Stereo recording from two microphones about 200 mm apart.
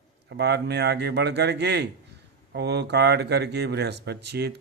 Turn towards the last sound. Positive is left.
turn(degrees=-55)  # may be behind; listen again after turning